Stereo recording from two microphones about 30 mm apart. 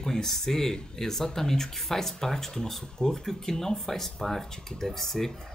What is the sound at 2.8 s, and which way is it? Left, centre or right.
Speech, left.